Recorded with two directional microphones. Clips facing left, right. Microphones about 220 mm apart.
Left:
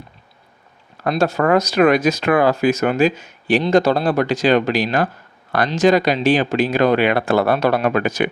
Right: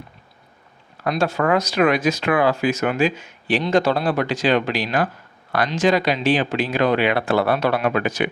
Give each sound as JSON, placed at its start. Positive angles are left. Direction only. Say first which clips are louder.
{"t": 1.1, "sound": "speech", "louder": "left 3 dB", "side_deg": 40}